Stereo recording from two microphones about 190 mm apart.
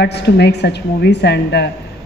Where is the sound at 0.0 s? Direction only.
60° left (ahead or behind).